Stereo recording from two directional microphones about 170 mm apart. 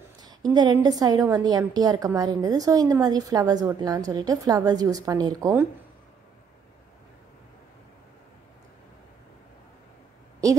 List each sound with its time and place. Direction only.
0.5 s a woman's voice: 25° right (ahead or behind)